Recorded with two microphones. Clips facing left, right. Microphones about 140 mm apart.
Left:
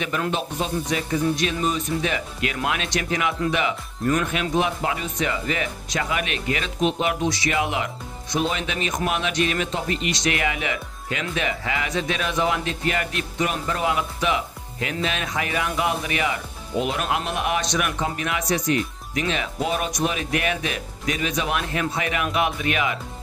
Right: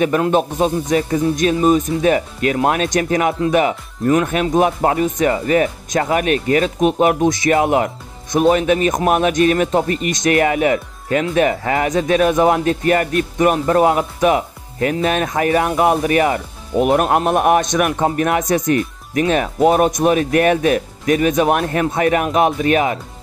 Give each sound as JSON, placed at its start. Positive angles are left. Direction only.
{"t": 0.3, "sound": "speech", "side_deg": -50}